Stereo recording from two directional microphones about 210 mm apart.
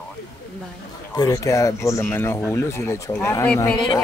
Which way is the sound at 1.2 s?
15° left (ahead or behind).